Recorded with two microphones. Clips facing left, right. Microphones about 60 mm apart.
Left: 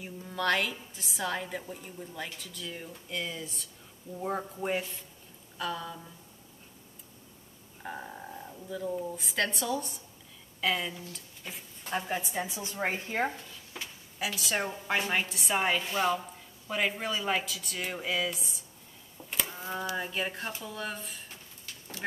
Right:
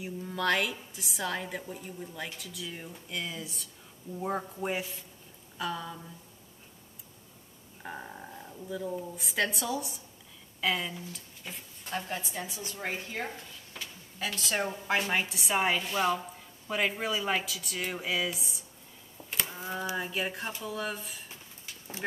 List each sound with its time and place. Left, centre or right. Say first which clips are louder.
0.0 s a woman's voice: even; centre
7.8 s a woman's voice: left 1 dB; centre
11.9 s a woman's voice: left 3 dB; centre
12.2 s a woman's voice: left 4 dB; left
13.7 s a woman's voice: left 2 dB; centre
19.3 s a sound: even; centre
20.0 s a woman's voice: even; centre